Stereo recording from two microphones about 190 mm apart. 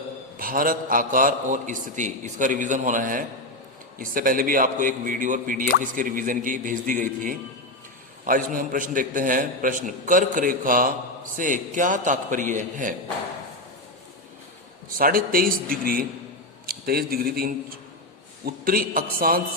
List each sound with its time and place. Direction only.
0.3 s a man's voice: 50° right (ahead or behind)
14.9 s a man's voice: 50° right (ahead or behind)